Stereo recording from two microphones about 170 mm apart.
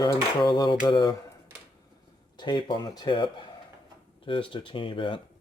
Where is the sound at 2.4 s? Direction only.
25° left (ahead or behind).